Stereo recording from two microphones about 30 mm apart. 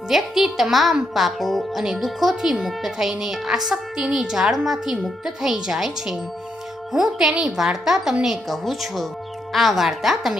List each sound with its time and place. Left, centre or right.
0.1 s a woman's voice: centre
2.4 s a woman's voice: centre
8.4 s a woman's voice: centre